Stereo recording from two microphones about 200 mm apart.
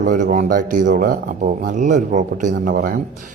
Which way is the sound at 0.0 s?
40° right (ahead or behind).